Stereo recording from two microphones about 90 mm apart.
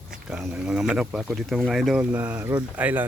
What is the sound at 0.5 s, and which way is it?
Speech, 5° right (ahead or behind).